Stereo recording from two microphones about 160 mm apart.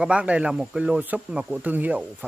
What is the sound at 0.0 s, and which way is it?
Speech, 10° right (ahead or behind).